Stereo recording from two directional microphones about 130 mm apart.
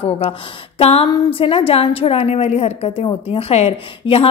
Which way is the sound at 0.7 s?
50° left (ahead or behind).